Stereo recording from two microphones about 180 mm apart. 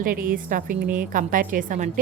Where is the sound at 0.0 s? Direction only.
50° right (ahead or behind).